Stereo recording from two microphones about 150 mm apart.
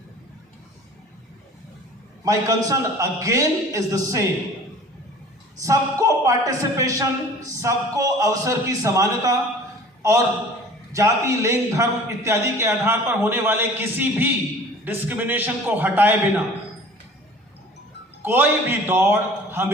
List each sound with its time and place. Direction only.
2.2 s a man's voice: 25° right (ahead or behind)
5.6 s a man's voice: 20° right (ahead or behind)
10.9 s a man's voice: 20° right (ahead or behind)
18.2 s a man's voice: 15° right (ahead or behind)